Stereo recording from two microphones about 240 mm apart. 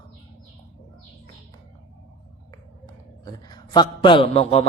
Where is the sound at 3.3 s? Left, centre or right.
Centre.